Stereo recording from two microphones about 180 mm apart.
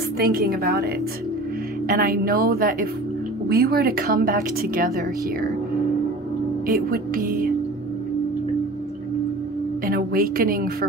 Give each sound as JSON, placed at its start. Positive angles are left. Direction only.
{"t": 0.2, "sound": "a woman's voice", "side_deg": -55}
{"t": 1.9, "sound": "a woman's voice", "side_deg": -55}
{"t": 6.7, "sound": "speech", "side_deg": -55}
{"t": 9.8, "sound": "a woman's voice", "side_deg": -55}